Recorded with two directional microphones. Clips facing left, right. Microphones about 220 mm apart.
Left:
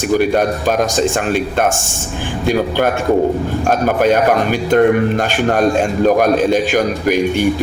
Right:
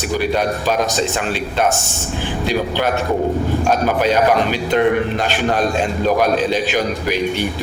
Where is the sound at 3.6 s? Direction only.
50° left (ahead or behind).